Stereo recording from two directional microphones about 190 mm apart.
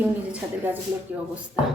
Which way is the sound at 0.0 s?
5° right (ahead or behind).